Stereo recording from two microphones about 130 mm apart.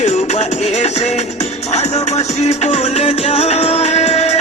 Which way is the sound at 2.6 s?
50° left (ahead or behind).